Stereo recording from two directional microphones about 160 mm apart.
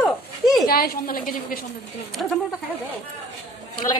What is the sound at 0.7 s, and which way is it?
Speech, 65° left (ahead or behind).